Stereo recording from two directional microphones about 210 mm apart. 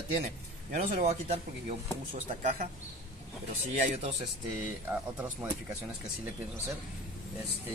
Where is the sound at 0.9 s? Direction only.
30° right (ahead or behind).